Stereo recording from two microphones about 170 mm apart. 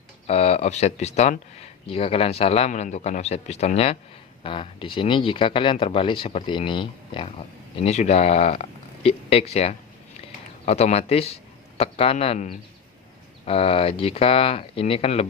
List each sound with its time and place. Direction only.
0.3 s speech: 40° left (ahead or behind)
7.8 s speech: 40° left (ahead or behind)